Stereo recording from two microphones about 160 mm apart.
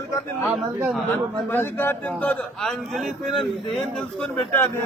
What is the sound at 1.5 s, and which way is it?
A man's voice, 15° left (ahead or behind).